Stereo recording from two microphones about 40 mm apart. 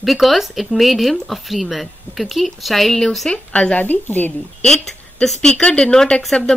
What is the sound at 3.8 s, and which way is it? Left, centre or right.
Speech, left.